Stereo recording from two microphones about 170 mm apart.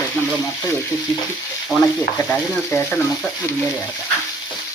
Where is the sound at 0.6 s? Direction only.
20° left (ahead or behind).